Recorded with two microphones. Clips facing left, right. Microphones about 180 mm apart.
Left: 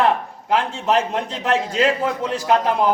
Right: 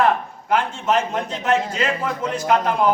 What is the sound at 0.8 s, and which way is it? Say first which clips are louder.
Speech: left 3 dB; 35° left (ahead or behind).